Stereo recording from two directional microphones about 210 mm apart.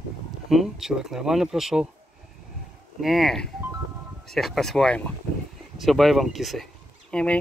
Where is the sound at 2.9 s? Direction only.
Centre (ahead or behind).